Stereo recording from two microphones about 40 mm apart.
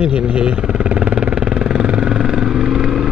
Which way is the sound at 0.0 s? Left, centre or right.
Right.